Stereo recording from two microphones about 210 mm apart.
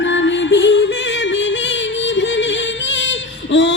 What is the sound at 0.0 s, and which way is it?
Music, 60° left (ahead or behind).